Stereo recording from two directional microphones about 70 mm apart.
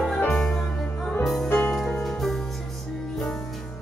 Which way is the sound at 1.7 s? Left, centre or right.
Centre.